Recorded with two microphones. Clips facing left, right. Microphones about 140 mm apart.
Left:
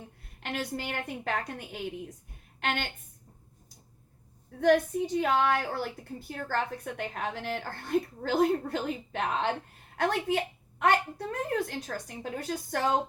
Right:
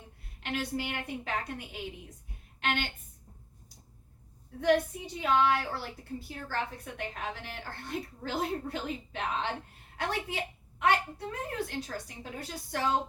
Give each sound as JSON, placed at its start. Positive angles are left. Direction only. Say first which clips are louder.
{"t": 0.3, "sound": "a woman's voice", "louder": "even", "side_deg": 50}
{"t": 4.6, "sound": "a woman's voice", "louder": "left 3 dB", "side_deg": 50}